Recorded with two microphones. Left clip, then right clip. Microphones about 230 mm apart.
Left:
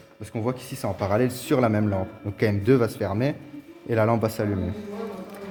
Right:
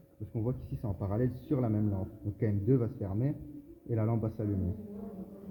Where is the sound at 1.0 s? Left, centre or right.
Left.